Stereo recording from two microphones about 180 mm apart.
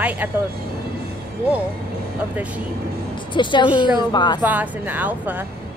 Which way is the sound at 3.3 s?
25° left (ahead or behind).